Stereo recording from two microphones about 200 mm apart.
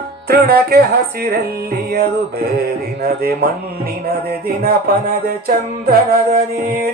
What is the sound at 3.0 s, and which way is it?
Speech, 50° right (ahead or behind).